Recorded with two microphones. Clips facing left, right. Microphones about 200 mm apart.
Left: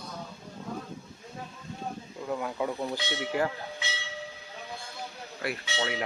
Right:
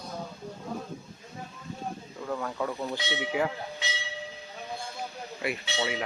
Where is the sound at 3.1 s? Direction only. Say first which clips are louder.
Right 1 dB; 5° right (ahead or behind).